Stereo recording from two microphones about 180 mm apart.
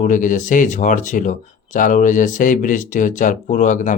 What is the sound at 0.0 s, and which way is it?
Speech, 45° left (ahead or behind).